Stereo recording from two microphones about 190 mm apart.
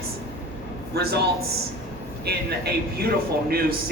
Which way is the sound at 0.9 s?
60° right (ahead or behind).